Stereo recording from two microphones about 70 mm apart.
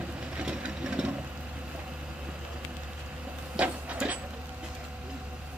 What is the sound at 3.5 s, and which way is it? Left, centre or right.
Printer, centre.